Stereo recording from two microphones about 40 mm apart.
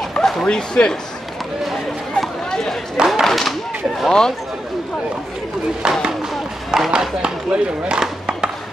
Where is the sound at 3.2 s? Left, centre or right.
Centre.